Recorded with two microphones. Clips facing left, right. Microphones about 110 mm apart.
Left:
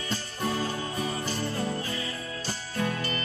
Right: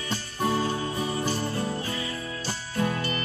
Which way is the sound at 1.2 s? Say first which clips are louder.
Right 2 dB; 35° right (ahead or behind).